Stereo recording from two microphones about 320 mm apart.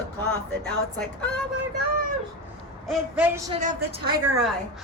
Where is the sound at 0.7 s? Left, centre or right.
Centre.